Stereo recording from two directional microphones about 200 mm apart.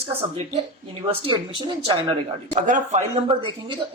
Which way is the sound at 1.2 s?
25° right (ahead or behind).